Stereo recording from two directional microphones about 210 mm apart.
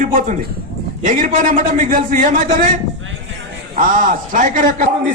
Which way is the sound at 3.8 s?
40° right (ahead or behind).